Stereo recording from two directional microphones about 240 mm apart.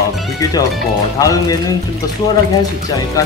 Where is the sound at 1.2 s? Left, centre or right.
Centre.